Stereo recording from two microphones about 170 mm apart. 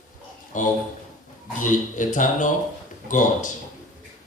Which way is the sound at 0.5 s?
50° left (ahead or behind).